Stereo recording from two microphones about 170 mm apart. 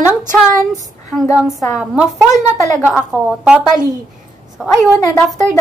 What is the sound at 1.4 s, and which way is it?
A woman's voice, 5° right (ahead or behind).